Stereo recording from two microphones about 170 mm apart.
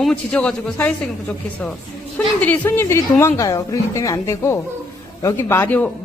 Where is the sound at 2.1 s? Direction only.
10° left (ahead or behind).